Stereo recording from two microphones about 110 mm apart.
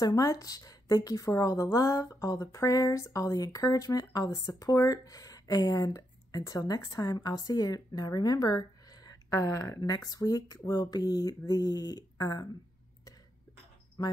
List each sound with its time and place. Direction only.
0.0 s speech: 30° left (ahead or behind)
14.0 s speech: 35° left (ahead or behind)